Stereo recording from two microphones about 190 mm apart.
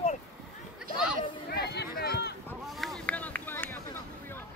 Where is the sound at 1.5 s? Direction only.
60° left (ahead or behind).